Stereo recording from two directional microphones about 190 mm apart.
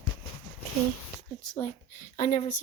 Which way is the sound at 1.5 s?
30° left (ahead or behind).